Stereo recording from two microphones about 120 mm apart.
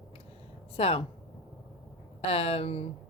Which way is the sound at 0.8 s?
55° left (ahead or behind).